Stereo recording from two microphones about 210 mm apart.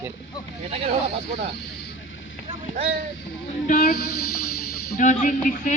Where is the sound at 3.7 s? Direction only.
45° left (ahead or behind).